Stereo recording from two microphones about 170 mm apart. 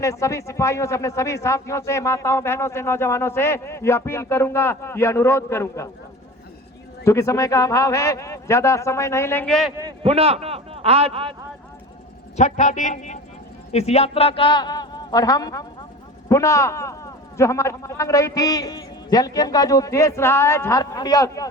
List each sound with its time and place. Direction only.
0.0 s a man's voice: 20° left (ahead or behind)
7.0 s a man's voice: 15° left (ahead or behind)
10.0 s a man's voice: 35° right (ahead or behind)
12.4 s a man's voice: 45° left (ahead or behind); by 21.4 s 20° left (ahead or behind)